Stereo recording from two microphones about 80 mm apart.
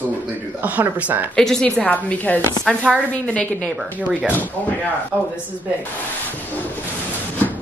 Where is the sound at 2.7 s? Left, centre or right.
Centre.